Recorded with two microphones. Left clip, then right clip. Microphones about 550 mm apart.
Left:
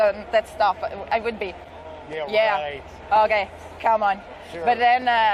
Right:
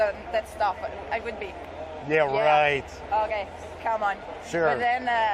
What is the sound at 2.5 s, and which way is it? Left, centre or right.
Speech, right.